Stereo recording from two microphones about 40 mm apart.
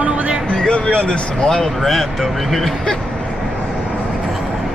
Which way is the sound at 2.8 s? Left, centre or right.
Centre.